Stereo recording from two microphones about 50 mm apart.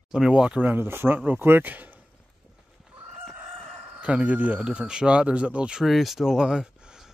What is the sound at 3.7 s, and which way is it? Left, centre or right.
Chicken, centre.